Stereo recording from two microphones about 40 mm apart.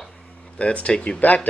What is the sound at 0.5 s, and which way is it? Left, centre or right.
Speech, left.